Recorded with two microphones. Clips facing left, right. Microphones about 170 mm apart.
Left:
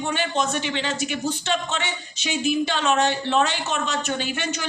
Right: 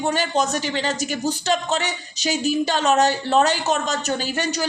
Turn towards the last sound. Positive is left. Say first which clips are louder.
# right 3 dB
turn(degrees=-40)  # may be behind; listen again after turning